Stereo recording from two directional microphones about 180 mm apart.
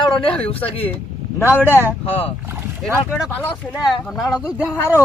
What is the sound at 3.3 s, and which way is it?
Speech, 10° left (ahead or behind).